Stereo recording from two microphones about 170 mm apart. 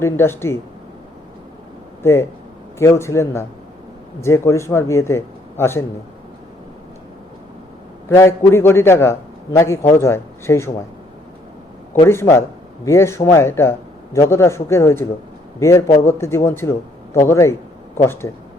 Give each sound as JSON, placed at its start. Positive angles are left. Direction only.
{"t": 0.0, "sound": "a man's voice", "side_deg": 15}
{"t": 2.7, "sound": "a man's voice", "side_deg": 15}
{"t": 8.1, "sound": "a man's voice", "side_deg": 15}
{"t": 12.0, "sound": "a man's voice", "side_deg": 15}